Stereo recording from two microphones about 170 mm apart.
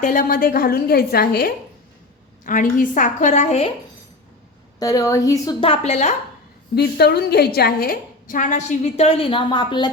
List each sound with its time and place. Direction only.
0.0 s a woman's voice: 55° left (ahead or behind)
2.4 s a woman's voice: 50° left (ahead or behind)
4.8 s a woman's voice: 20° left (ahead or behind)
5.5 s a woman's voice: 35° left (ahead or behind)
6.7 s a woman's voice: 70° left (ahead or behind); by 9.9 s 25° left (ahead or behind)